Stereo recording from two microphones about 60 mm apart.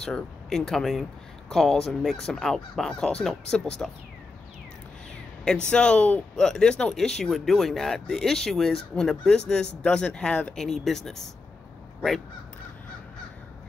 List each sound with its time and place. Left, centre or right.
0.0 s speech: centre
5.7 s speech: centre